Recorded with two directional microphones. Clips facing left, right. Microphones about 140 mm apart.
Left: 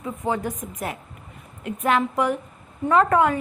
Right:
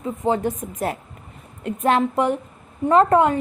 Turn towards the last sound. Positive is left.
turn(degrees=-25)  # may be behind; listen again after turning